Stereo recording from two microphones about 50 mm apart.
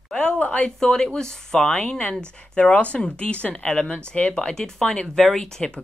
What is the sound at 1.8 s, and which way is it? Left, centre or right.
Speech, left.